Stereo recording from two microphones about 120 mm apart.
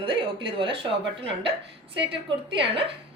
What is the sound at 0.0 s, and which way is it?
A woman's voice, 40° right (ahead or behind).